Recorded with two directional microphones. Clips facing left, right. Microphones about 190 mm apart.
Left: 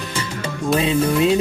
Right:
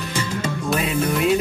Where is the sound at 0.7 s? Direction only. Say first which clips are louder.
Left 5 dB; 25° left (ahead or behind).